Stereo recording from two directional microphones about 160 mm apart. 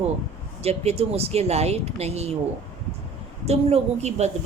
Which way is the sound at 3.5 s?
40° right (ahead or behind).